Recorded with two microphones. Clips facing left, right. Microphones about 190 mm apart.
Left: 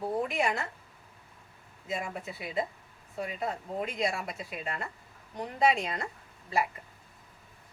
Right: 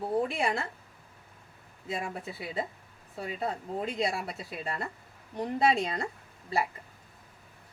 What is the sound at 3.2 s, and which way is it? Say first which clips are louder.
Speech: right 2 dB; 35° right (ahead or behind).